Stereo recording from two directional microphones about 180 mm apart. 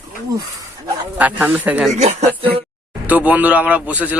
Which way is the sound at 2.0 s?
40° right (ahead or behind).